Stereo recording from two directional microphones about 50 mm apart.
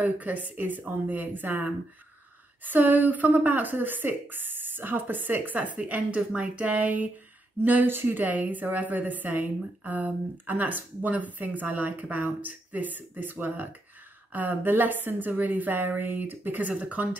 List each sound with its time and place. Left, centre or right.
0.0 s a woman's voice: right